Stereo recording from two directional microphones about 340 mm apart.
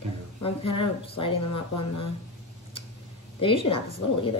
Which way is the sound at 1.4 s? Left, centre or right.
Left.